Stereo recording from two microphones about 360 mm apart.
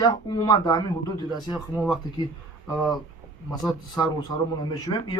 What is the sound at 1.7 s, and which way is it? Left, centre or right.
Speech, centre.